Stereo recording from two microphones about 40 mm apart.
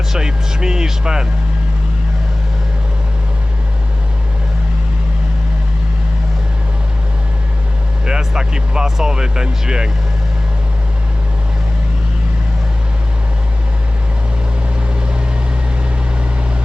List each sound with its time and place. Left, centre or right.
0.1 s speech: centre
8.0 s speech: centre